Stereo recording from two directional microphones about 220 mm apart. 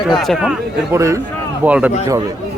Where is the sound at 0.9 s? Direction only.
15° right (ahead or behind).